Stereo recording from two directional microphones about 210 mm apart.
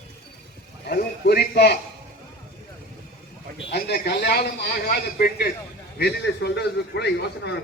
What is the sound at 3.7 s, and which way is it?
A man's voice, 50° left (ahead or behind).